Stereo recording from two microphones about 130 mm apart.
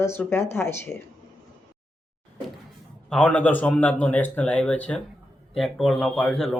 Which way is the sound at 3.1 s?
10° left (ahead or behind).